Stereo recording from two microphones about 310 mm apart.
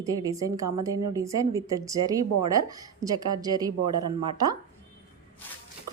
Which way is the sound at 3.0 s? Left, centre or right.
Centre.